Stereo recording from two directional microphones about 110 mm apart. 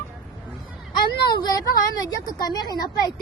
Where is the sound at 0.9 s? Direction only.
40° left (ahead or behind).